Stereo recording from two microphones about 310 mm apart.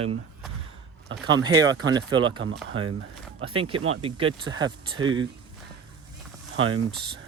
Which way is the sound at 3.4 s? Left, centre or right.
Centre.